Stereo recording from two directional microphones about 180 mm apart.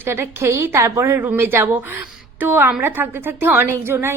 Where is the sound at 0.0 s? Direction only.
15° right (ahead or behind).